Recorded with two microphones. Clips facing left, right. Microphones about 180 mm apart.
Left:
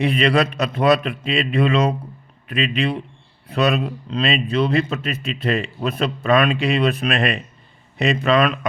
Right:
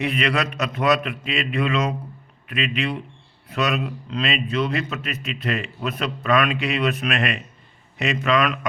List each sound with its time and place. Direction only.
0.0 s a man's voice: 30° left (ahead or behind)